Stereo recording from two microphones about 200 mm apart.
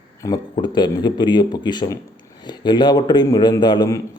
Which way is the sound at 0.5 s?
20° left (ahead or behind).